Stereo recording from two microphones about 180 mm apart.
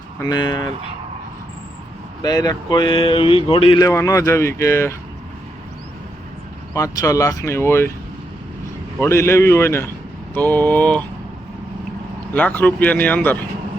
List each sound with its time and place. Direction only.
0.2 s speech: 25° left (ahead or behind)
2.2 s speech: 20° left (ahead or behind)
3.8 s speech: 15° left (ahead or behind)
6.7 s speech: 15° left (ahead or behind)
9.0 s speech: 15° left (ahead or behind)
12.3 s speech: 10° left (ahead or behind)